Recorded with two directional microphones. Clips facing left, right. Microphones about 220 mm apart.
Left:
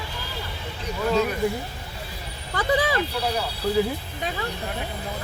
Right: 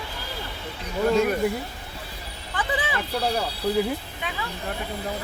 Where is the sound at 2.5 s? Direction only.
40° left (ahead or behind).